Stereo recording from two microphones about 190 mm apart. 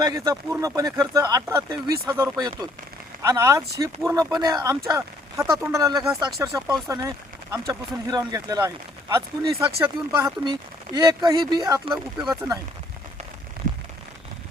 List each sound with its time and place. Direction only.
0.0 s speech: 20° right (ahead or behind)